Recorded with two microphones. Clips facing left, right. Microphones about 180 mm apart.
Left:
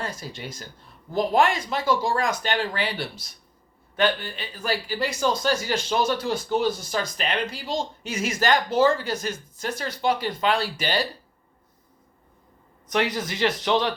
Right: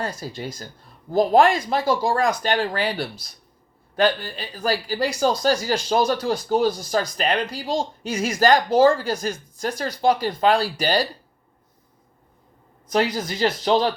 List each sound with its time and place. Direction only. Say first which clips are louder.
0.0 s speech: right 4 dB; 35° right (ahead or behind)
12.9 s speech: right 3 dB; 35° right (ahead or behind)